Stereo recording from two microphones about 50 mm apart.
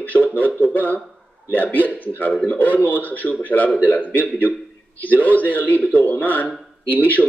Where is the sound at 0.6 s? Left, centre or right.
Left.